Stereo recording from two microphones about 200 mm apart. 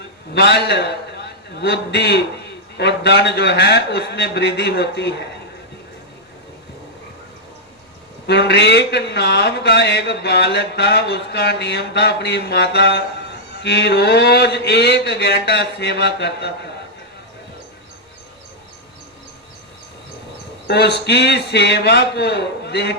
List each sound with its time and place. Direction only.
0.3 s a man's voice: 55° left (ahead or behind)
8.3 s speech: 55° left (ahead or behind)
20.7 s speech: 55° left (ahead or behind)